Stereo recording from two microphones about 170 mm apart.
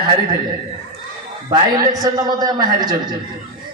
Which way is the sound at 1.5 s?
20° right (ahead or behind).